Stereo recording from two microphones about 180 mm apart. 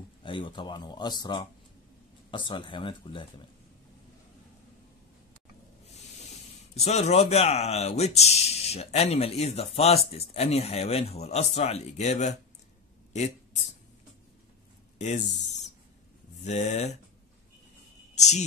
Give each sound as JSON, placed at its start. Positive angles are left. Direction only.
{"t": 0.2, "sound": "speech", "side_deg": 30}
{"t": 6.7, "sound": "a man's voice", "side_deg": 35}
{"t": 15.0, "sound": "speech", "side_deg": 40}
{"t": 18.1, "sound": "a sound", "side_deg": 40}